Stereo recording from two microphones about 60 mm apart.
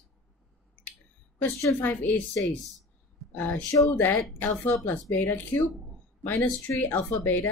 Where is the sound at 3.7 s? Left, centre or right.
Left.